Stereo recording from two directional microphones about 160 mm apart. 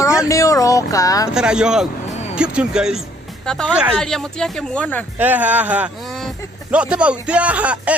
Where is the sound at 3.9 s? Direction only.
5° left (ahead or behind).